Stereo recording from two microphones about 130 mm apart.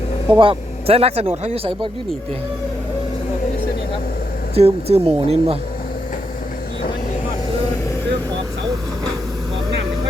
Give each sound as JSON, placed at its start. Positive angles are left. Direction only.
{"t": 0.3, "sound": "speech", "side_deg": -45}
{"t": 4.5, "sound": "speech", "side_deg": -50}